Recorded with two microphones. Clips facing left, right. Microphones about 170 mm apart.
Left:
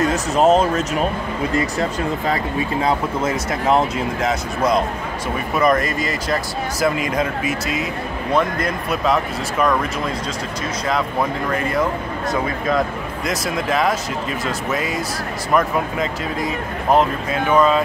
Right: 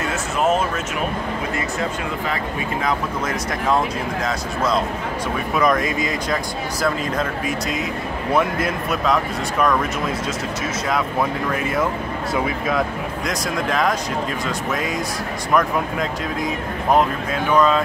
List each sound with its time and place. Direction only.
0.0 s speech: 35° left (ahead or behind)
2.8 s speech: 30° left (ahead or behind)
5.6 s speech: centre (ahead or behind)
11.5 s speech: 5° right (ahead or behind)
13.3 s speech: 5° left (ahead or behind)